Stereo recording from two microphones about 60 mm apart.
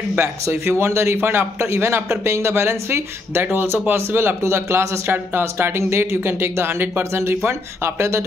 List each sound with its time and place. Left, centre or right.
0.2 s speech: right